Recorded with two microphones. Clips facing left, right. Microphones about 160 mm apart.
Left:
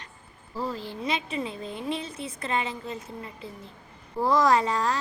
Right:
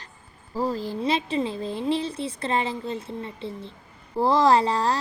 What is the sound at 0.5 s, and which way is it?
Speech, 40° right (ahead or behind).